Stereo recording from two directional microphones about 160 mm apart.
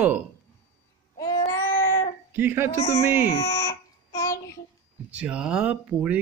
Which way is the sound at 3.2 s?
20° left (ahead or behind).